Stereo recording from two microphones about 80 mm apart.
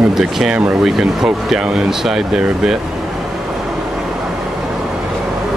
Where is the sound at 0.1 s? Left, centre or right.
Centre.